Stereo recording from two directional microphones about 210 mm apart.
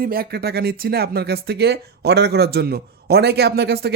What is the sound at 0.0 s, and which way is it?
Speech, 45° right (ahead or behind).